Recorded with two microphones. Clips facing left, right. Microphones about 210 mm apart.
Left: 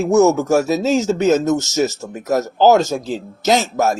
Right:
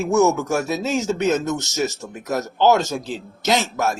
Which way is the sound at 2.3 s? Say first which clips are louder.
Left 4 dB; 45° left (ahead or behind).